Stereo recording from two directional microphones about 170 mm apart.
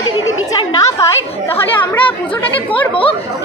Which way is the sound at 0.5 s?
25° left (ahead or behind).